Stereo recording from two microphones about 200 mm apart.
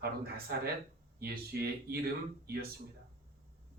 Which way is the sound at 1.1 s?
50° right (ahead or behind).